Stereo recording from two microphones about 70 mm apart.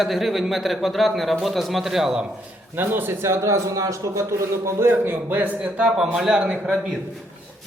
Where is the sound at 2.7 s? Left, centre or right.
Right.